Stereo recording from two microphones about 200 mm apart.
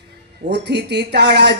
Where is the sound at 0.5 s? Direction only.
55° right (ahead or behind).